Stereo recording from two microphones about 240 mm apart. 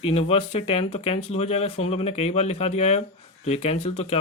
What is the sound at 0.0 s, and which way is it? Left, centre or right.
Speech, left.